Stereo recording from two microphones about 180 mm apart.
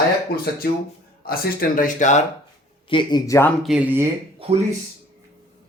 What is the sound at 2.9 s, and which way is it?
Speech, 25° left (ahead or behind).